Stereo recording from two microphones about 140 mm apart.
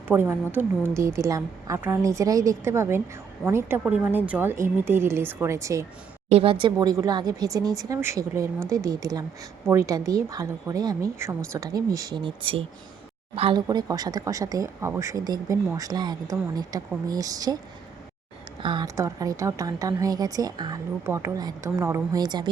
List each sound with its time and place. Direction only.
0.1 s speech: 15° right (ahead or behind)
6.2 s speech: 45° right (ahead or behind)
13.6 s speech: 30° right (ahead or behind)
18.6 s speech: 35° right (ahead or behind)
18.9 s speech: 25° right (ahead or behind)